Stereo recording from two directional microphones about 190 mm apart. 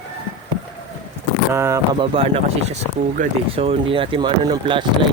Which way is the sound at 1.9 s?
30° right (ahead or behind).